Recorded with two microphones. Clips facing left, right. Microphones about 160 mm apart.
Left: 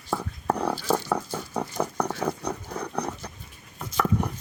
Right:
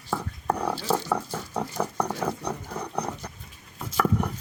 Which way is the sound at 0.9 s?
Centre (ahead or behind).